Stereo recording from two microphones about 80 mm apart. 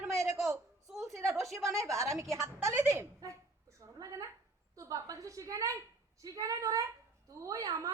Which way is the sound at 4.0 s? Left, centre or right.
Right.